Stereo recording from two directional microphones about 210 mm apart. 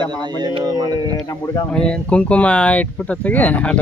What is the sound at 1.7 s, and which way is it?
Speech, 5° left (ahead or behind).